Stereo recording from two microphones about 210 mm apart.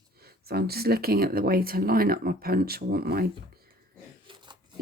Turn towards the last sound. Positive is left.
turn(degrees=-25)  # may be behind; listen again after turning